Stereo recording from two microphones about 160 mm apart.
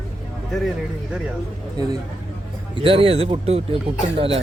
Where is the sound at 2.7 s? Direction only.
35° right (ahead or behind).